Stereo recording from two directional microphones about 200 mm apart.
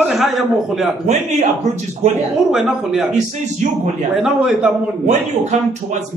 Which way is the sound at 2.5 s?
Centre (ahead or behind).